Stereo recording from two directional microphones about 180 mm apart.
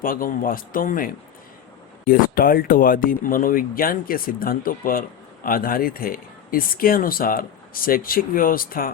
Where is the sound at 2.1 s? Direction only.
50° left (ahead or behind).